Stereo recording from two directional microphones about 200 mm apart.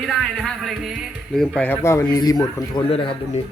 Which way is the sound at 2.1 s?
20° left (ahead or behind).